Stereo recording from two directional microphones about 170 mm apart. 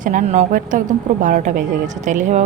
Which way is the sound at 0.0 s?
45° right (ahead or behind).